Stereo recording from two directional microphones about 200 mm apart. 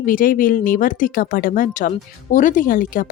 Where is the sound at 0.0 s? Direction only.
45° left (ahead or behind).